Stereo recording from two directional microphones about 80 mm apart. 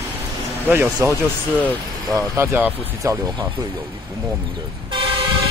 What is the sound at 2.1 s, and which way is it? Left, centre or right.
Speech, right.